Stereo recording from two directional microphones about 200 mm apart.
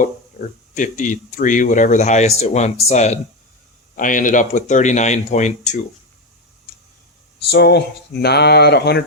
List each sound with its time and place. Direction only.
0.0 s speech: 40° left (ahead or behind)
7.5 s speech: 55° left (ahead or behind)